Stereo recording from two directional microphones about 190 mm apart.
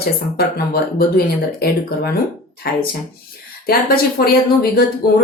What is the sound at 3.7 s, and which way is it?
Speech, 55° left (ahead or behind).